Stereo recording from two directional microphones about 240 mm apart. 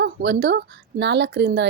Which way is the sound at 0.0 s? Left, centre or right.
Right.